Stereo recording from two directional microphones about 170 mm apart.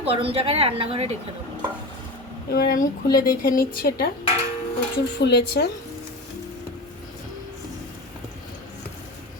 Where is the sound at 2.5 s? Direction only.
60° left (ahead or behind).